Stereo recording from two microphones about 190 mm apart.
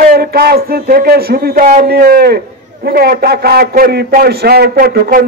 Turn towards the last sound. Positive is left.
turn(degrees=-55)  # may be behind; listen again after turning